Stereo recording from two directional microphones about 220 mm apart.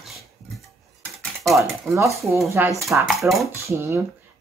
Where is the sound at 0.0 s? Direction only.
Centre (ahead or behind).